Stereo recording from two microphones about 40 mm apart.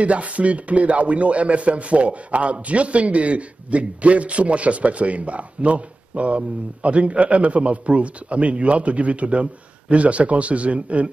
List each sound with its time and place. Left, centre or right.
0.0 s speech: right